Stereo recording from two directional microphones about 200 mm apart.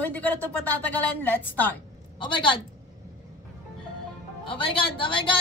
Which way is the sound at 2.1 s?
25° left (ahead or behind).